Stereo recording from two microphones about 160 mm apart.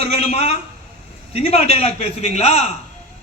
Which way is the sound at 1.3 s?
40° left (ahead or behind).